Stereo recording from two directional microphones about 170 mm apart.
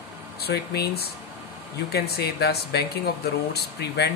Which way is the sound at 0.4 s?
70° left (ahead or behind).